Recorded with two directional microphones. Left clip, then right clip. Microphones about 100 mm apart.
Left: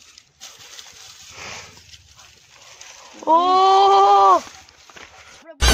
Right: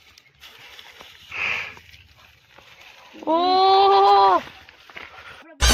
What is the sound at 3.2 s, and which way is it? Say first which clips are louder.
Speech: left 3 dB; 20° left (ahead or behind).